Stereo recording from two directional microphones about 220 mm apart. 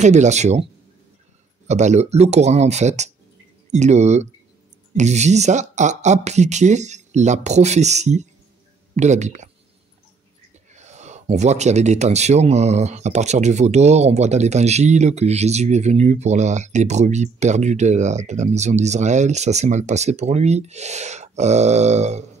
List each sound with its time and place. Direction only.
0.0 s speech: 30° right (ahead or behind)
1.7 s speech: 30° right (ahead or behind)
10.7 s speech: 30° right (ahead or behind)